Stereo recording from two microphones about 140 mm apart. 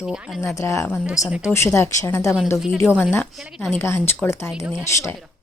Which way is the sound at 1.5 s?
20° left (ahead or behind).